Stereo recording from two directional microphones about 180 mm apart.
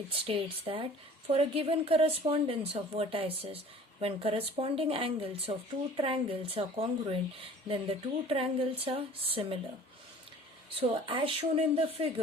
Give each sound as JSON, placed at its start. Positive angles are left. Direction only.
{"t": 0.1, "sound": "speech", "side_deg": -30}
{"t": 10.8, "sound": "speech", "side_deg": -30}